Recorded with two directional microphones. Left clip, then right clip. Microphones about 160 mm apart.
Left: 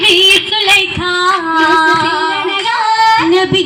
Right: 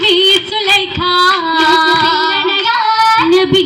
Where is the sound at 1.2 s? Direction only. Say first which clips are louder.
Left 2 dB; 45° left (ahead or behind).